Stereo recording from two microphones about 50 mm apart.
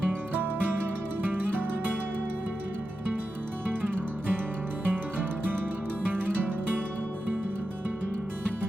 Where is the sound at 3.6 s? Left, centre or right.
Right.